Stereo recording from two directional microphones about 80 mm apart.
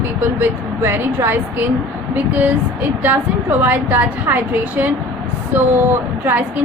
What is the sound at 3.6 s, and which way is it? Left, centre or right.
A woman's voice, right.